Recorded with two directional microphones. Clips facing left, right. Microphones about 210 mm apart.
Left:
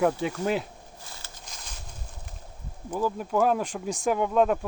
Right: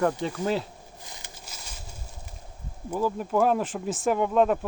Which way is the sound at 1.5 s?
5° right (ahead or behind).